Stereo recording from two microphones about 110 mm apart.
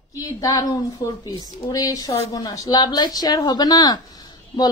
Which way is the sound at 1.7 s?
35° left (ahead or behind).